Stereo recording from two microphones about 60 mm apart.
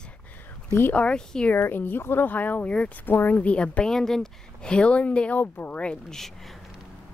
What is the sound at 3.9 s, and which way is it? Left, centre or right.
Speech, centre.